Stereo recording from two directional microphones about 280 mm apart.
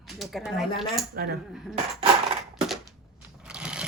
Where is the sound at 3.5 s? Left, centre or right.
Centre.